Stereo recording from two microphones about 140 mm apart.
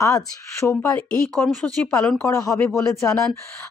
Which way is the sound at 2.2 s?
25° left (ahead or behind).